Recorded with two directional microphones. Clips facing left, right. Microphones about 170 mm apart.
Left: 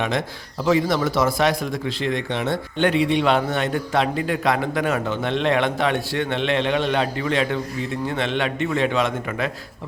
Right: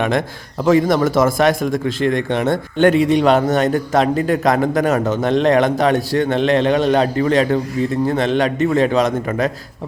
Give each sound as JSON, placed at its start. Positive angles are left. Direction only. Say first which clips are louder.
{"t": 0.6, "sound": "a man's voice", "louder": "right 6 dB", "side_deg": -50}